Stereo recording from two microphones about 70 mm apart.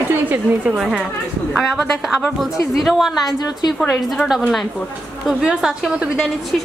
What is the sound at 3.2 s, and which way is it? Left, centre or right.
Speech, left.